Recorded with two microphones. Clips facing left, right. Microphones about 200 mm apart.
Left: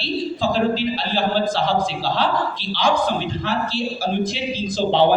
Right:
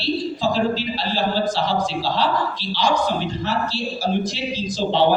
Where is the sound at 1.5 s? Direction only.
55° left (ahead or behind).